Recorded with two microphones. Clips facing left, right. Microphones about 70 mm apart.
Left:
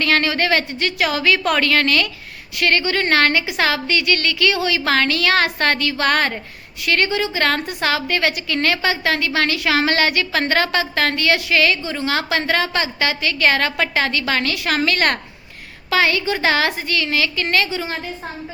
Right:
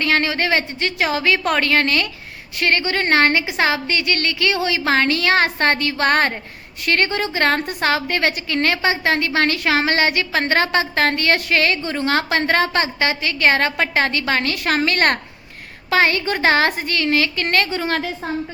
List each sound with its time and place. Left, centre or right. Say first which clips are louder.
0.0 s a woman's voice: left 1 dB; right
17.8 s a woman's voice: right 6 dB; right